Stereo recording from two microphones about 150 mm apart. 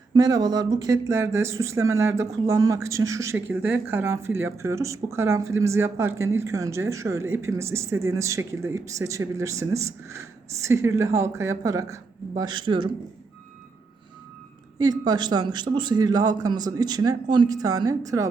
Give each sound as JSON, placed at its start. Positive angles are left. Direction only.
{"t": 0.1, "sound": "a woman's voice", "side_deg": -25}
{"t": 14.8, "sound": "a woman's voice", "side_deg": -25}